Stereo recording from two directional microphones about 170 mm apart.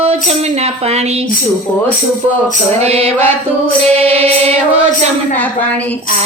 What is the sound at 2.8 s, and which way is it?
A woman's voice, 40° right (ahead or behind).